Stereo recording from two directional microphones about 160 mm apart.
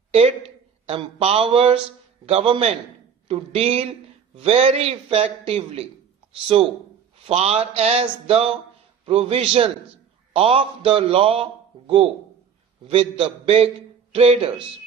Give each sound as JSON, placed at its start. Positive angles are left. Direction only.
{"t": 0.8, "sound": "a man's voice", "side_deg": -35}
{"t": 12.8, "sound": "a man's voice", "side_deg": -35}